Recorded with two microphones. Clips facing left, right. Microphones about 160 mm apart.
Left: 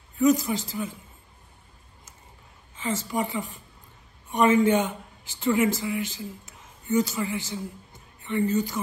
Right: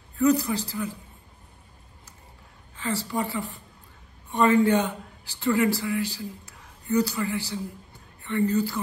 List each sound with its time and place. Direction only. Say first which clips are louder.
0.2 s a woman's voice: even; 20° left (ahead or behind)
2.7 s a woman's voice: even; 20° left (ahead or behind)